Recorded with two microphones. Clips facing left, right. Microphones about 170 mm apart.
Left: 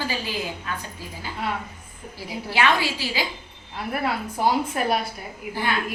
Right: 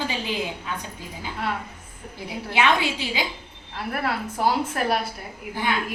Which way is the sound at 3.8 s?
Centre (ahead or behind).